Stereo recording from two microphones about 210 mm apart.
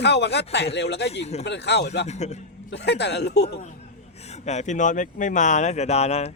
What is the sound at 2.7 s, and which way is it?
Speech, 55° left (ahead or behind).